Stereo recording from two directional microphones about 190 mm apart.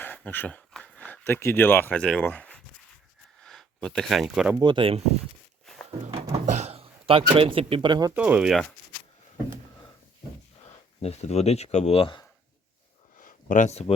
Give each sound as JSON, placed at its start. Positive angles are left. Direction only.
{"t": 0.0, "sound": "speech", "side_deg": 10}
{"t": 4.6, "sound": "speech", "side_deg": -25}
{"t": 6.1, "sound": "a sound", "side_deg": -30}
{"t": 8.1, "sound": "speech", "side_deg": -10}
{"t": 11.0, "sound": "speech", "side_deg": 35}
{"t": 13.1, "sound": "a sound", "side_deg": 45}